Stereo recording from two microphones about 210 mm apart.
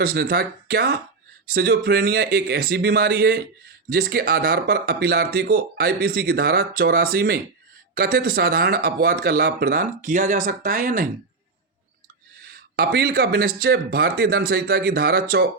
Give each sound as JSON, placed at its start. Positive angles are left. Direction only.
{"t": 0.0, "sound": "speech", "side_deg": -45}
{"t": 12.7, "sound": "speech", "side_deg": -45}